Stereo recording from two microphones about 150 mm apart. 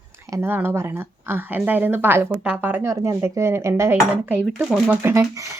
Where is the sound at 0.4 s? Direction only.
15° right (ahead or behind).